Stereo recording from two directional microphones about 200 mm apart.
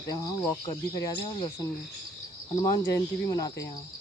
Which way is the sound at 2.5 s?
15° left (ahead or behind).